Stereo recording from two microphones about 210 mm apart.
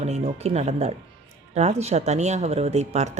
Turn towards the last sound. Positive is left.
turn(degrees=-30)  # may be behind; listen again after turning